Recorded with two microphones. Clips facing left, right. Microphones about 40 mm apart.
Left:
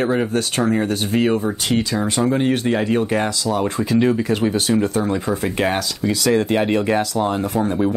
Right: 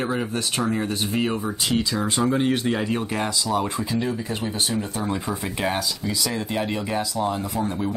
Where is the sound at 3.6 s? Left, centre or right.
Left.